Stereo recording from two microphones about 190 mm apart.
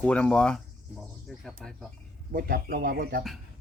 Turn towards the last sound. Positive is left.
turn(degrees=-50)  # may be behind; listen again after turning